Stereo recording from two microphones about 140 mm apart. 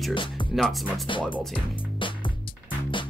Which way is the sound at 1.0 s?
35° left (ahead or behind).